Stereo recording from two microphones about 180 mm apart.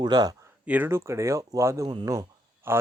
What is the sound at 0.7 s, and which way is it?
Speech, 10° right (ahead or behind).